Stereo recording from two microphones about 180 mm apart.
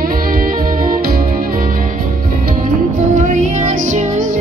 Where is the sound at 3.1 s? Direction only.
45° right (ahead or behind).